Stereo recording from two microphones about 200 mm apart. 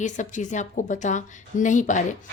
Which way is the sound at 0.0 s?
40° left (ahead or behind).